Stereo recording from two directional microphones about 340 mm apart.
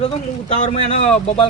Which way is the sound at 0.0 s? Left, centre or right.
Centre.